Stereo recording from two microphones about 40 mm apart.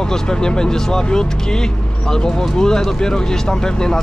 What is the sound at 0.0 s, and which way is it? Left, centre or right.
Speech, centre.